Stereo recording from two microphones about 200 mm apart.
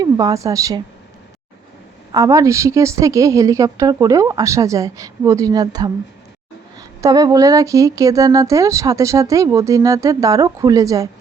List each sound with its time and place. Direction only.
0.0 s a woman's voice: 20° right (ahead or behind)
2.1 s speech: 15° right (ahead or behind)